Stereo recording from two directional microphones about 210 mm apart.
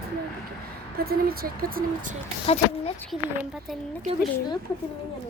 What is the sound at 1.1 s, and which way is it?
Speech, 45° right (ahead or behind).